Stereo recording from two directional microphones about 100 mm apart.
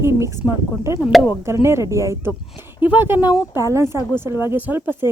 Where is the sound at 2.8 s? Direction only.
20° right (ahead or behind).